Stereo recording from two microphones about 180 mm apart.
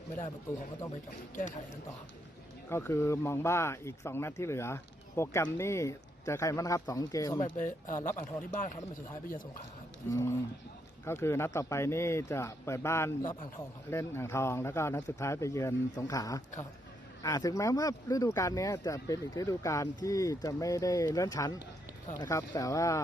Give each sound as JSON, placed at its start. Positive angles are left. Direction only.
{"t": 1.4, "sound": "speech", "side_deg": 45}
{"t": 2.6, "sound": "speech", "side_deg": 15}
{"t": 7.5, "sound": "speech", "side_deg": 45}
{"t": 10.1, "sound": "speech", "side_deg": 15}